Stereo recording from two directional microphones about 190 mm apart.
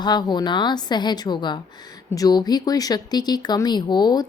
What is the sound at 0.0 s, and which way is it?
Speech, 20° left (ahead or behind).